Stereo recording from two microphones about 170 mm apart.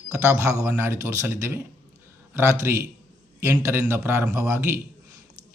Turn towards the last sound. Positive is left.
turn(degrees=-15)  # may be behind; listen again after turning